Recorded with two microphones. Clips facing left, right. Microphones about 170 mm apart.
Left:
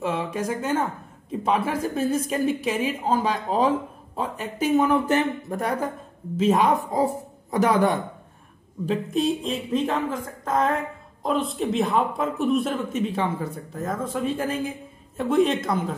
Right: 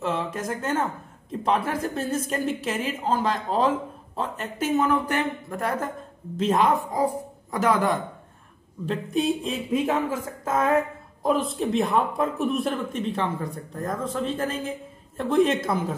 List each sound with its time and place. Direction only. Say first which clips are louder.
0.0 s a woman's voice: left 1 dB; 10° left (ahead or behind)
8.8 s speech: left 1 dB; 5° left (ahead or behind)